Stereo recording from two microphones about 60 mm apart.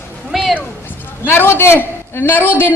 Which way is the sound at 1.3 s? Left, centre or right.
Left.